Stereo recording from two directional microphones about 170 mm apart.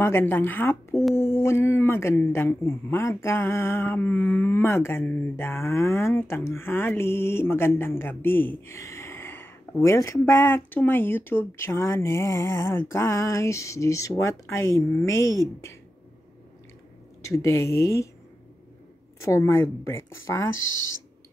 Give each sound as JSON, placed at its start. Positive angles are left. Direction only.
{"t": 0.0, "sound": "speech", "side_deg": 15}
{"t": 17.2, "sound": "speech", "side_deg": 15}
{"t": 19.1, "sound": "speech", "side_deg": 15}